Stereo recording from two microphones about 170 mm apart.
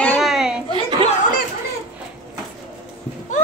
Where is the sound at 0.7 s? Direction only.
30° right (ahead or behind).